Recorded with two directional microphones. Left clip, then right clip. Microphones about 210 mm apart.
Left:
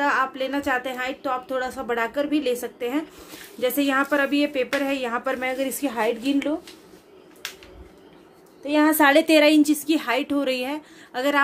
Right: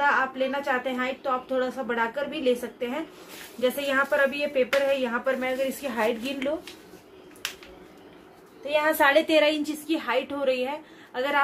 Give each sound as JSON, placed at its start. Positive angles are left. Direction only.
{"t": 0.0, "sound": "a woman's voice", "side_deg": 55}
{"t": 8.6, "sound": "a woman's voice", "side_deg": 45}